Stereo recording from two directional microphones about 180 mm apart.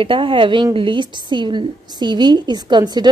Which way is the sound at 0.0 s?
30° right (ahead or behind).